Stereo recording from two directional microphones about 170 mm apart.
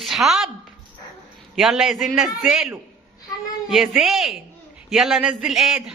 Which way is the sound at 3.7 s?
Centre (ahead or behind).